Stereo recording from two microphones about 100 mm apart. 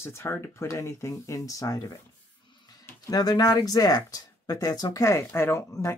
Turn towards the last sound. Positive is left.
turn(degrees=30)  # may be behind; listen again after turning